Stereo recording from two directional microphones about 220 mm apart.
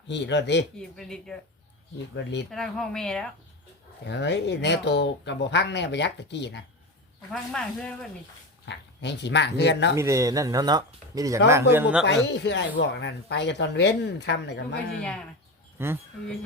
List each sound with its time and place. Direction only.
0.1 s speech: 55° left (ahead or behind)
0.8 s speech: centre (ahead or behind)
2.1 s speech: 50° left (ahead or behind)
2.5 s speech: centre (ahead or behind)
4.0 s speech: 50° left (ahead or behind)
7.5 s speech: 5° left (ahead or behind)
8.6 s speech: 55° left (ahead or behind)
9.9 s speech: 15° right (ahead or behind)
12.0 s speech: 50° left (ahead or behind)
15.8 s speech: 10° right (ahead or behind)